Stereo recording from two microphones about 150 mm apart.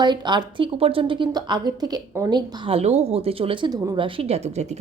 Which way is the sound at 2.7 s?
45° right (ahead or behind).